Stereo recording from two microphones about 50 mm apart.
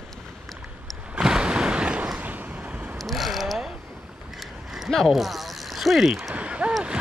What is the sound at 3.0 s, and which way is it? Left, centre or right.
Mechanisms, centre.